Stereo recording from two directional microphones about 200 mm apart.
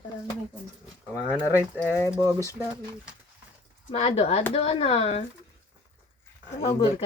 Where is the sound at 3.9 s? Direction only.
30° left (ahead or behind).